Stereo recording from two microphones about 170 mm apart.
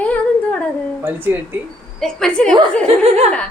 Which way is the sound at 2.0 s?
5° left (ahead or behind).